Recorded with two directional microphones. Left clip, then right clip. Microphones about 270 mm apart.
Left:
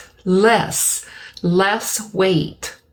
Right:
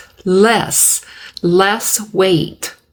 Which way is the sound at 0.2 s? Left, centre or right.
Right.